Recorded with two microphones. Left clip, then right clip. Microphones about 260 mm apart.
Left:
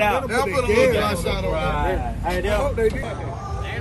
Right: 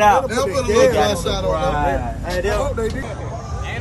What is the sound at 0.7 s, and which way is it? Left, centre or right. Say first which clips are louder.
Speech: right 5 dB; centre.